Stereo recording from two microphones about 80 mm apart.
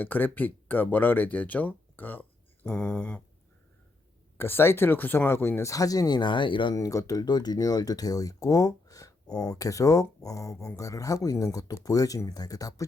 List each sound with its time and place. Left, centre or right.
0.0 s speech: left
2.6 s speech: centre
4.4 s speech: left
5.7 s speech: left
6.1 s speech: left
6.7 s speech: left